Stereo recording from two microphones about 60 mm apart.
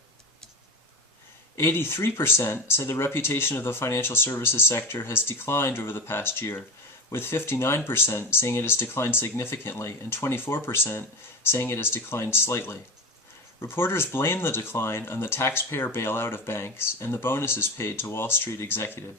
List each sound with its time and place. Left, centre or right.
1.5 s speech: left